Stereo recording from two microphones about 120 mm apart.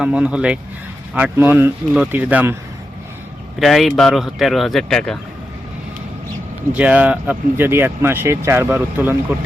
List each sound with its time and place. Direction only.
0.0 s speech: 5° right (ahead or behind)
3.6 s speech: centre (ahead or behind)
6.7 s speech: 10° right (ahead or behind)